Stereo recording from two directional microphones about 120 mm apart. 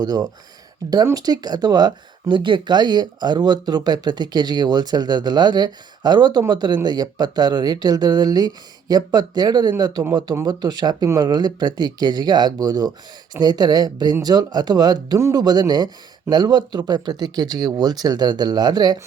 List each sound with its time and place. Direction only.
0.0 s speech: 35° right (ahead or behind)